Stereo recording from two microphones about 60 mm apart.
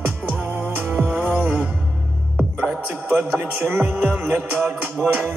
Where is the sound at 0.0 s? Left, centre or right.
Right.